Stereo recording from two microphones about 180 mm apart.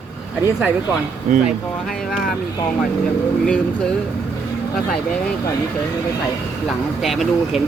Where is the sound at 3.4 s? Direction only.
5° left (ahead or behind).